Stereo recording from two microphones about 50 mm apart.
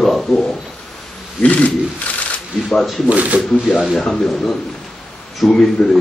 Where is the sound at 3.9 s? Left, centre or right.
Centre.